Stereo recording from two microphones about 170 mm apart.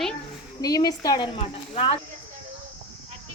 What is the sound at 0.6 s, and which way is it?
A woman's voice, 20° left (ahead or behind).